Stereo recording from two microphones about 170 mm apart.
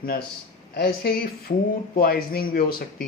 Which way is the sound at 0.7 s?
65° left (ahead or behind).